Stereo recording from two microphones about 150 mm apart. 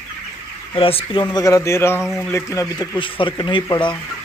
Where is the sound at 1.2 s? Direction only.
20° left (ahead or behind).